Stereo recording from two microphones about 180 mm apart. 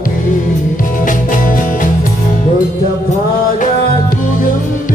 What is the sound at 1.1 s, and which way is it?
Music, 50° left (ahead or behind).